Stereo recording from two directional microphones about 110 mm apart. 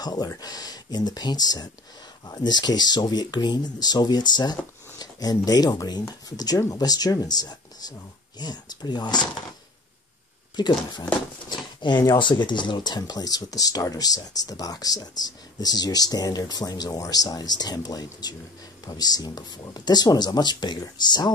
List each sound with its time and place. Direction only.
0.0 s speech: 40° left (ahead or behind)
10.5 s speech: 40° left (ahead or behind)